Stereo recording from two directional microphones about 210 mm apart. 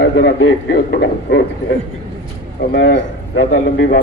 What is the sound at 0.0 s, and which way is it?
A man's voice, 55° left (ahead or behind).